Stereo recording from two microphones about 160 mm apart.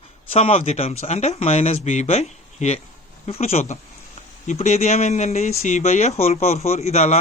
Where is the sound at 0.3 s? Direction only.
40° left (ahead or behind).